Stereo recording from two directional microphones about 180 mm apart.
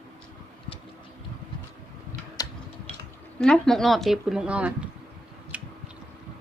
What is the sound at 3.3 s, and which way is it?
A woman's voice, 5° left (ahead or behind).